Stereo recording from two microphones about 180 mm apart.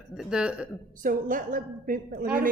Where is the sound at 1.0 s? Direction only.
50° right (ahead or behind).